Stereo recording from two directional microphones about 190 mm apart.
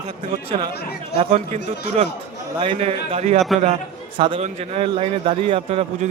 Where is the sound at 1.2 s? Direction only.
35° right (ahead or behind).